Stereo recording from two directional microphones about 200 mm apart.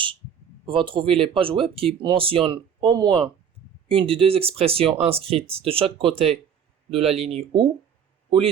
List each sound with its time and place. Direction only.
0.7 s speech: 25° right (ahead or behind)